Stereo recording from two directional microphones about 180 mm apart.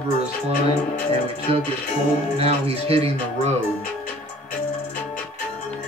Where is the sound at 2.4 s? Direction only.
35° right (ahead or behind).